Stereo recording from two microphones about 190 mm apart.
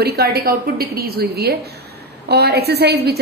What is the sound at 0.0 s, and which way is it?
A woman's voice, 55° right (ahead or behind).